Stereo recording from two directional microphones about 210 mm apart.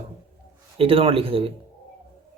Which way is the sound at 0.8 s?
25° right (ahead or behind).